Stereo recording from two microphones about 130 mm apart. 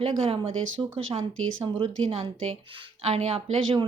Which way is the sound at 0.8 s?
25° right (ahead or behind).